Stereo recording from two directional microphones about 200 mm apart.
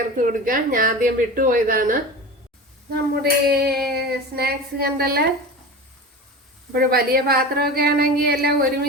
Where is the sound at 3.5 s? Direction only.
50° right (ahead or behind).